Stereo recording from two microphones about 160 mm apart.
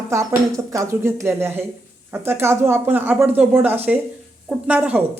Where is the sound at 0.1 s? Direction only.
15° right (ahead or behind).